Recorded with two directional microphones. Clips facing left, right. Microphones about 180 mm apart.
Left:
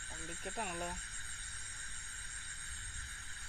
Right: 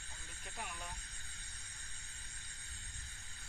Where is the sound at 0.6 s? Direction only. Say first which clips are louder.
Left 6 dB; 50° left (ahead or behind).